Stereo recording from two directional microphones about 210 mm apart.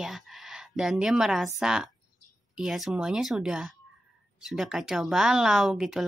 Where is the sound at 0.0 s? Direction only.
Centre (ahead or behind).